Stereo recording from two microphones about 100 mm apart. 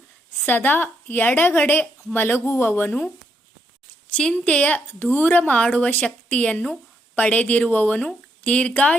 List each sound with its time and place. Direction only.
0.4 s a woman's voice: 20° left (ahead or behind)
4.1 s a woman's voice: 10° left (ahead or behind)